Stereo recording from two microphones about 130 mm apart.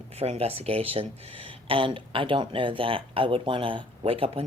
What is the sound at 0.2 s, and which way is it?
Speech, 50° right (ahead or behind).